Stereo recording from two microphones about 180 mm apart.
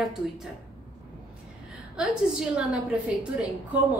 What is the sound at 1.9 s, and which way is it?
Speech, 5° right (ahead or behind).